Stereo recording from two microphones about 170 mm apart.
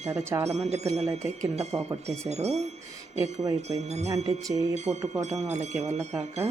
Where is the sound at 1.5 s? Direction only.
40° right (ahead or behind).